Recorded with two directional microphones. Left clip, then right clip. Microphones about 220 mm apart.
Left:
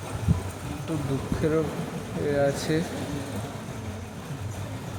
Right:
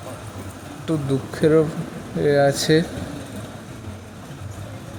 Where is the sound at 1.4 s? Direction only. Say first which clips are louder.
Right 9 dB; 25° right (ahead or behind).